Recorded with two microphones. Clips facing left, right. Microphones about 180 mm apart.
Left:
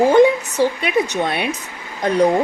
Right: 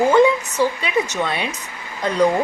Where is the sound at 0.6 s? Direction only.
60° left (ahead or behind).